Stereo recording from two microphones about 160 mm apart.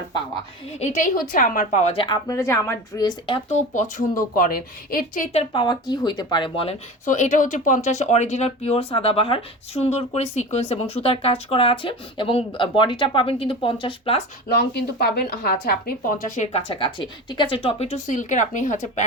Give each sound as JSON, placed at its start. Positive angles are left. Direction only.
{"t": 0.8, "sound": "a woman's voice", "side_deg": 50}
{"t": 2.1, "sound": "speech", "side_deg": 20}
{"t": 4.2, "sound": "speech", "side_deg": 65}
{"t": 5.3, "sound": "speech", "side_deg": 35}
{"t": 7.0, "sound": "a woman's voice", "side_deg": 50}
{"t": 14.5, "sound": "a woman's voice", "side_deg": 80}